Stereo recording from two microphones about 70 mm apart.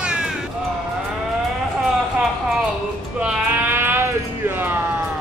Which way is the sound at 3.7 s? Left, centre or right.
Right.